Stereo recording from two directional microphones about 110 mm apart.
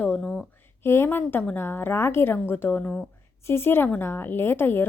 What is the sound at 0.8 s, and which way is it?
A woman's voice, 20° left (ahead or behind).